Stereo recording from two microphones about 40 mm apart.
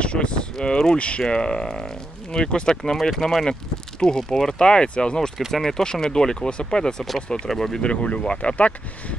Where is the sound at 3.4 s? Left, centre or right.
Centre.